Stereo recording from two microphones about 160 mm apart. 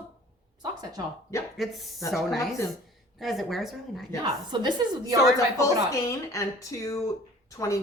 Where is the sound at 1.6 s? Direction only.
Centre (ahead or behind).